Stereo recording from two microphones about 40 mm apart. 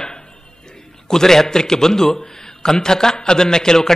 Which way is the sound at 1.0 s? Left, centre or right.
Centre.